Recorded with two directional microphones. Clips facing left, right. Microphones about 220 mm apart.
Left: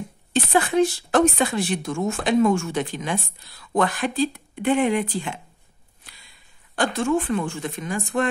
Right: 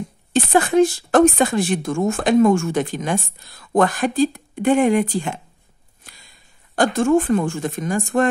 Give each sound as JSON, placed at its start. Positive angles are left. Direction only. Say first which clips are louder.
{"t": 0.3, "sound": "speech", "louder": "right 4 dB", "side_deg": -45}
{"t": 6.0, "sound": "a sound", "louder": "right 4 dB", "side_deg": -45}
{"t": 6.7, "sound": "speech", "louder": "right 6 dB", "side_deg": -45}